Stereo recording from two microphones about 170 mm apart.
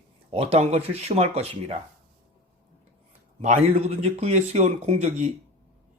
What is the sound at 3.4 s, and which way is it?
A man's voice, 40° right (ahead or behind).